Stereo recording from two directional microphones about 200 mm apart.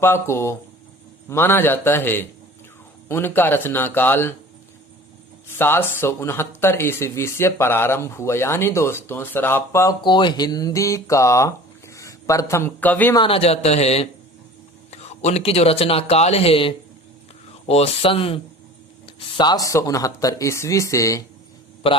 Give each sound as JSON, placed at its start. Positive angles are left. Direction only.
{"t": 0.0, "sound": "speech", "side_deg": 10}
{"t": 5.5, "sound": "speech", "side_deg": 10}
{"t": 13.1, "sound": "speech", "side_deg": 25}